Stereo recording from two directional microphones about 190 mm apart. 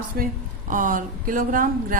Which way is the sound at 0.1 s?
50° right (ahead or behind).